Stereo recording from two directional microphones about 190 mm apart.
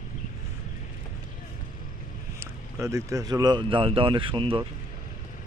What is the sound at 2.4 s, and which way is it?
Speech, 15° right (ahead or behind).